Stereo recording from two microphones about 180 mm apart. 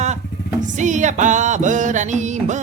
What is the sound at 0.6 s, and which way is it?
Music, 45° right (ahead or behind).